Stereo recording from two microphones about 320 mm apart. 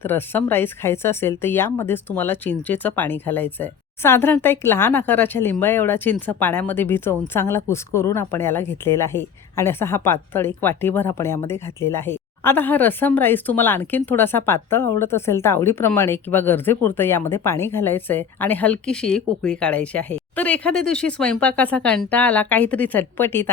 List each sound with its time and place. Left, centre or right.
0.0 s speech: centre